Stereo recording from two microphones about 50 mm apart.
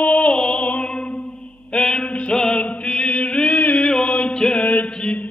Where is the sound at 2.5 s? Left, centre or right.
Left.